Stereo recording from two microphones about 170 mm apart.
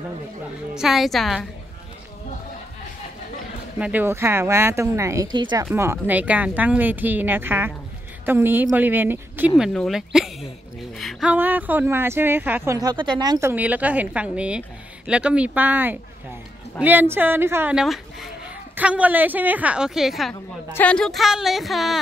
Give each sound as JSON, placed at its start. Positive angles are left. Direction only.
{"t": 0.7, "sound": "a woman's voice", "side_deg": 0}
{"t": 3.7, "sound": "speech", "side_deg": -10}
{"t": 5.8, "sound": "a woman's voice", "side_deg": -15}